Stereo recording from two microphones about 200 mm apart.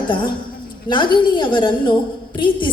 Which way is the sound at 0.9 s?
25° left (ahead or behind).